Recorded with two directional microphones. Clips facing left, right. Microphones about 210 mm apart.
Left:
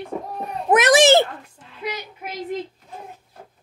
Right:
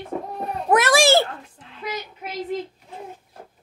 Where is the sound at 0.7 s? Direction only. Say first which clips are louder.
Left 3 dB; 20° left (ahead or behind).